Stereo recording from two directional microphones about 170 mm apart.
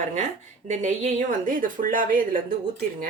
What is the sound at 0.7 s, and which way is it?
Speech, 45° right (ahead or behind).